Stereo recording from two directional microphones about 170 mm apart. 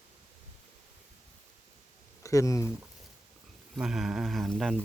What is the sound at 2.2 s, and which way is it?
Speech, 20° left (ahead or behind).